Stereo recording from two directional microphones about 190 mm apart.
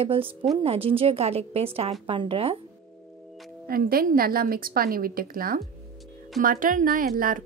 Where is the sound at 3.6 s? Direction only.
50° right (ahead or behind).